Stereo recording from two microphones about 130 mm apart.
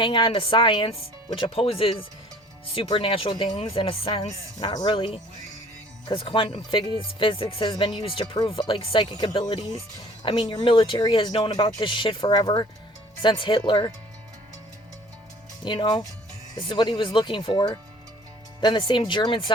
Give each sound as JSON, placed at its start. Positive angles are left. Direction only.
{"t": 0.0, "sound": "speech", "side_deg": 40}
{"t": 15.6, "sound": "speech", "side_deg": 35}